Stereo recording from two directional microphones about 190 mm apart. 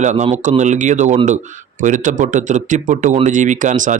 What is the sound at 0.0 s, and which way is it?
Speech, 40° right (ahead or behind).